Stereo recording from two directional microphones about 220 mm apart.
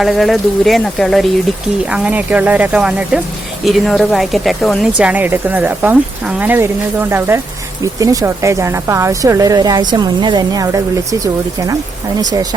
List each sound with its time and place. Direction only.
0.0 s speech: centre (ahead or behind)